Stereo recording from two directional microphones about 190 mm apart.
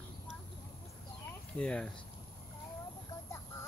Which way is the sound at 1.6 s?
5° left (ahead or behind).